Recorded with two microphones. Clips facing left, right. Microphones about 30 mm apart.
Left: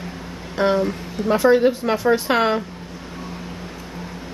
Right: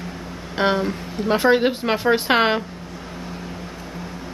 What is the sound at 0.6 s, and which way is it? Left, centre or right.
Speech, right.